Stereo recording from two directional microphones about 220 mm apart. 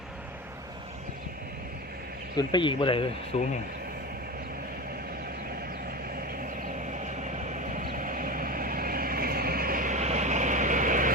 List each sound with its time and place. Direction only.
2.5 s speech: 20° left (ahead or behind)
6.9 s vehicle: 35° right (ahead or behind)